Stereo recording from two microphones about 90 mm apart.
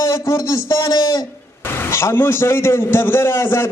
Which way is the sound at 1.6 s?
25° left (ahead or behind).